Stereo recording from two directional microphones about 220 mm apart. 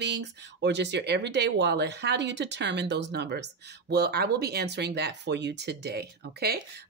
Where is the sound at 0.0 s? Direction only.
50° right (ahead or behind).